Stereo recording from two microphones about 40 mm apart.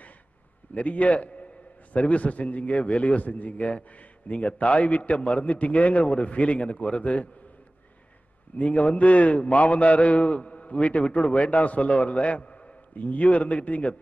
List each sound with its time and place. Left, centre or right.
0.7 s a man's voice: left
8.5 s a man's voice: left